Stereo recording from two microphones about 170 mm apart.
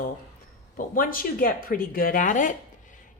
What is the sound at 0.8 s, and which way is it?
A woman's voice, 55° left (ahead or behind).